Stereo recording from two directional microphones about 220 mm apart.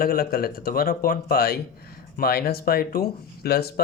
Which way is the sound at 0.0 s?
40° left (ahead or behind).